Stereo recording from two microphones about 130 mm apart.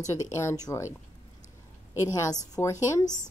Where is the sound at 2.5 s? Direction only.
30° left (ahead or behind).